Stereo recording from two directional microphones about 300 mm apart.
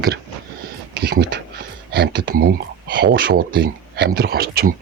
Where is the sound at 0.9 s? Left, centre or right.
Right.